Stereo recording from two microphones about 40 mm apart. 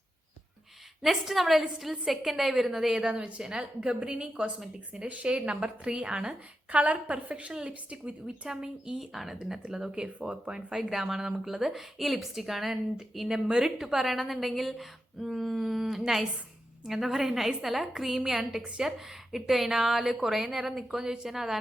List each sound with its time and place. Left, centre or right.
1.0 s a woman's voice: centre
3.0 s a woman's voice: right
3.4 s speech: centre
3.8 s a woman's voice: right
8.4 s a woman's voice: centre
9.0 s a woman's voice: centre
20.5 s speech: centre